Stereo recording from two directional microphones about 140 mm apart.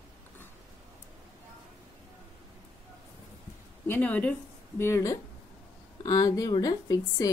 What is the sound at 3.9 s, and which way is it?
Speech, 10° left (ahead or behind).